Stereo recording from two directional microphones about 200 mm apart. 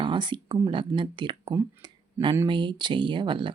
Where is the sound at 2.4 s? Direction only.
25° right (ahead or behind).